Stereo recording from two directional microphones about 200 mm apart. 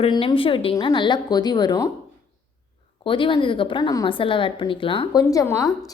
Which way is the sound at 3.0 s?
25° left (ahead or behind).